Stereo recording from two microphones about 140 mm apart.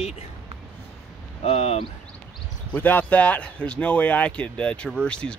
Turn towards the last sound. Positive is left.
turn(degrees=5)  # may be behind; listen again after turning